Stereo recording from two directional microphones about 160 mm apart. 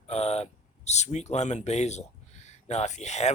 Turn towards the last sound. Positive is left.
turn(degrees=45)  # may be behind; listen again after turning